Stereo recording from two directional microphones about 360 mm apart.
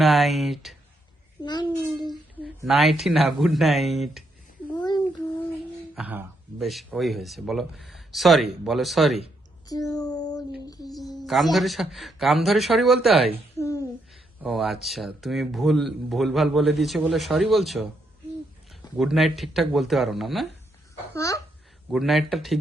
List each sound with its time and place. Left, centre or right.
0.0 s speech: centre
1.5 s a sound: centre
2.6 s speech: centre
4.7 s child singing: centre
5.9 s speech: centre
9.6 s a sound: centre
10.9 s speech: centre
21.1 s a sound: centre
21.9 s speech: centre